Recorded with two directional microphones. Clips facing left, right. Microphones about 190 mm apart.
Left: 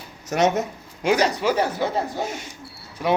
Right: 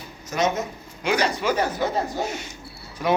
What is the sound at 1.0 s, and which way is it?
Speech, 40° left (ahead or behind).